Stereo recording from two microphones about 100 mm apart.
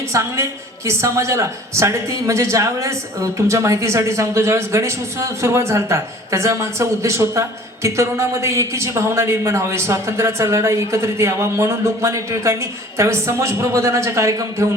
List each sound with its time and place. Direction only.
0.1 s speech: 30° right (ahead or behind)